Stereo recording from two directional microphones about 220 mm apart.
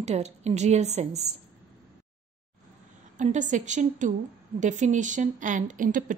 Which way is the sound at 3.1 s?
35° right (ahead or behind).